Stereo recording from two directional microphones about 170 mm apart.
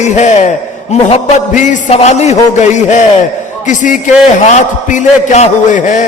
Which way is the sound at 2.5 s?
45° left (ahead or behind).